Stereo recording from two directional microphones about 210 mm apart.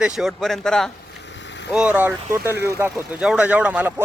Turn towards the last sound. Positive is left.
turn(degrees=-10)  # may be behind; listen again after turning